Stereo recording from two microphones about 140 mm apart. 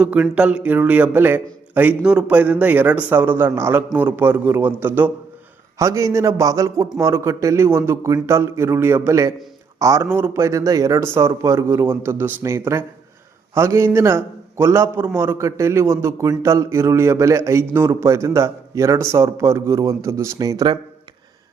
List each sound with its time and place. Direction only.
0.0 s a man's voice: 10° right (ahead or behind); by 20.7 s 25° right (ahead or behind)